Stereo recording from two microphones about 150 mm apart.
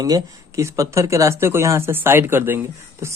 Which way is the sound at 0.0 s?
25° right (ahead or behind).